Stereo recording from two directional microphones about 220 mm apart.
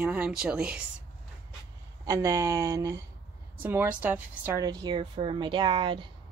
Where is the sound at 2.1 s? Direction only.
15° right (ahead or behind).